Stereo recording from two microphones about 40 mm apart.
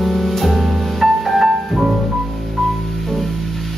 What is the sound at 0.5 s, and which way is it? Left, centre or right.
Music, centre.